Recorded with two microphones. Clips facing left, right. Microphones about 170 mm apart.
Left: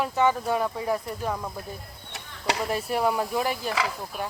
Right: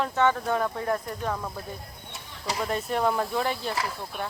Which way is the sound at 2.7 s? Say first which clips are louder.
Right 1 dB; 10° left (ahead or behind).